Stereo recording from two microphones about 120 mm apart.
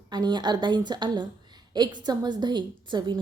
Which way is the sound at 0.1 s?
35° right (ahead or behind).